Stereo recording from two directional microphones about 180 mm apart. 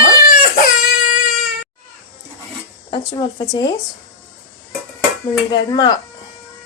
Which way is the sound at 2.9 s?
25° left (ahead or behind).